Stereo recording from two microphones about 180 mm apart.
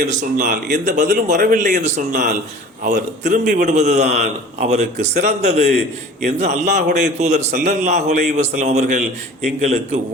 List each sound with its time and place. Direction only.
0.0 s a man's voice: 45° right (ahead or behind)